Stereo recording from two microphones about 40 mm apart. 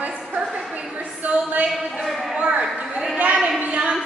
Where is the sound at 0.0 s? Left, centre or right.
Right.